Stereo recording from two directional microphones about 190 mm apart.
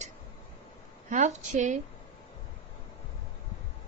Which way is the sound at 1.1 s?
40° right (ahead or behind).